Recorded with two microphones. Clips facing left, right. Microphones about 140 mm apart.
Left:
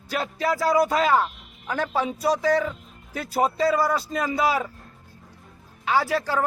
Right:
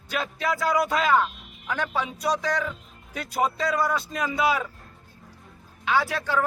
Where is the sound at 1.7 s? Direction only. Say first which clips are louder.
Left 3 dB; 40° left (ahead or behind).